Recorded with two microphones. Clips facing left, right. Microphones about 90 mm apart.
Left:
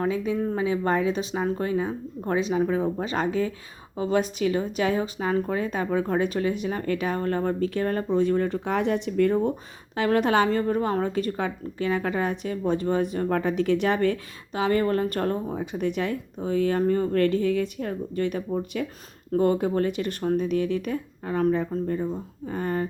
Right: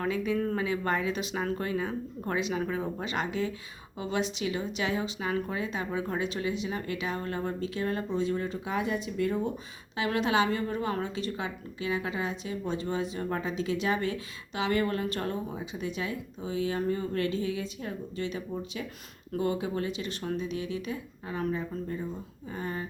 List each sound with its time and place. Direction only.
0.0 s speech: 30° left (ahead or behind)
0.3 s speech: 15° left (ahead or behind)
0.6 s a woman's voice: 30° left (ahead or behind); by 14.2 s 55° left (ahead or behind)
14.5 s speech: 40° left (ahead or behind); by 18.9 s 60° left (ahead or behind)
19.3 s a woman's voice: 45° left (ahead or behind)